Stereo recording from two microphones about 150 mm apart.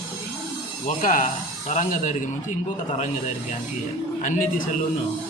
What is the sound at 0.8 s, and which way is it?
A man's voice, 60° left (ahead or behind).